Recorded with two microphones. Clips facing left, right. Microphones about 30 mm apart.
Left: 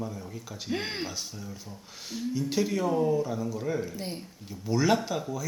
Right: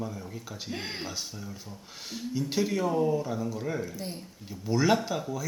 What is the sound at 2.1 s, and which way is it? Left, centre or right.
Speech, centre.